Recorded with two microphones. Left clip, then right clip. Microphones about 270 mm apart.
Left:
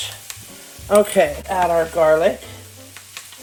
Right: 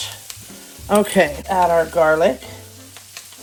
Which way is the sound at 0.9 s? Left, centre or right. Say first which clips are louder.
Left 1 dB; right.